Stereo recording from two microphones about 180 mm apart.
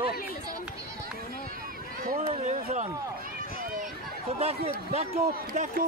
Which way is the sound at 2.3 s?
40° right (ahead or behind).